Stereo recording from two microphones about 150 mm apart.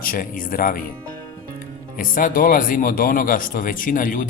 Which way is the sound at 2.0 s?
65° left (ahead or behind).